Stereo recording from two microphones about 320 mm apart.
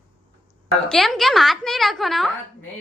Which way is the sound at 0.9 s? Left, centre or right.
Centre.